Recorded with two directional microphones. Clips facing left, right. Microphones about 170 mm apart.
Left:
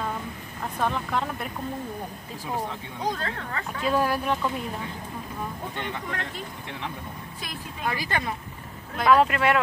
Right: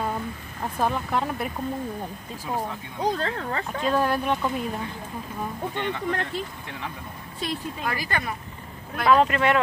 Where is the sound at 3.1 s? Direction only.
35° right (ahead or behind).